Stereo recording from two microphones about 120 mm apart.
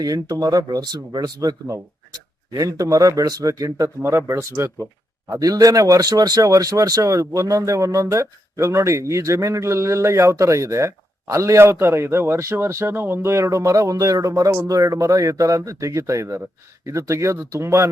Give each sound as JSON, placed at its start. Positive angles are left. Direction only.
{"t": 0.0, "sound": "speech", "side_deg": -30}